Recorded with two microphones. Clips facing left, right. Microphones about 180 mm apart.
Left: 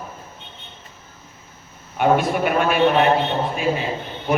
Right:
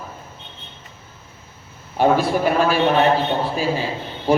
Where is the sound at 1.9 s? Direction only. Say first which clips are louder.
Right 1 dB; 30° right (ahead or behind).